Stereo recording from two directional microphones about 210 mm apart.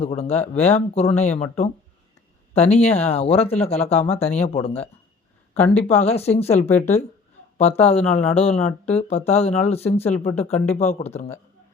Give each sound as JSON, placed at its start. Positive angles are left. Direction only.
{"t": 0.0, "sound": "speech", "side_deg": 30}